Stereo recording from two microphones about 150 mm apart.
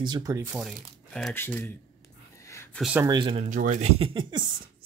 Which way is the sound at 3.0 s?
30° right (ahead or behind).